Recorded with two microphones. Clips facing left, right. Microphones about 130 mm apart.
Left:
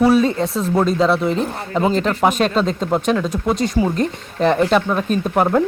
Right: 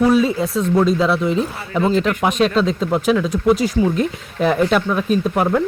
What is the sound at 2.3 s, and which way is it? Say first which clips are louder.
Speech: right 1 dB; centre (ahead or behind).